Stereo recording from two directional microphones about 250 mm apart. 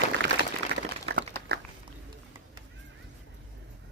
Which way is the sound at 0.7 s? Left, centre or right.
Right.